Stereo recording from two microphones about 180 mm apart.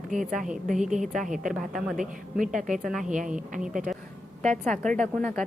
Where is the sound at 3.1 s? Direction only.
45° right (ahead or behind).